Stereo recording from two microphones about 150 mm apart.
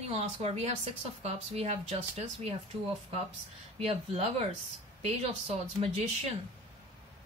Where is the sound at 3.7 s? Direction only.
40° right (ahead or behind).